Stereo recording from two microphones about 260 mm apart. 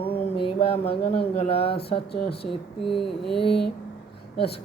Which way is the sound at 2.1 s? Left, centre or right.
Left.